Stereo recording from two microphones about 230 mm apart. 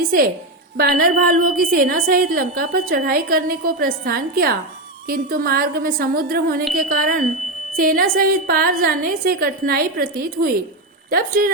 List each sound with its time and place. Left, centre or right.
0.0 s a woman's voice: right